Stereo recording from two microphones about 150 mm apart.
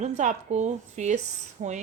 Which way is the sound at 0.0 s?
50° right (ahead or behind).